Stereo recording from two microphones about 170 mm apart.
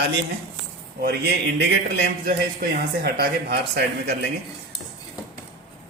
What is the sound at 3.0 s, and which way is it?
Speech, 65° right (ahead or behind).